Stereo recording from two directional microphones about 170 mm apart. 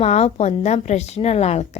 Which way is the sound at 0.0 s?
40° left (ahead or behind).